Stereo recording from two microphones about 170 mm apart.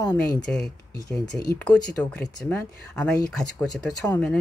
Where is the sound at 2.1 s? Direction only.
10° left (ahead or behind).